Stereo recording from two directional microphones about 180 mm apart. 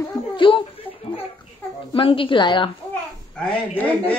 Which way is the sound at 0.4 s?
30° left (ahead or behind).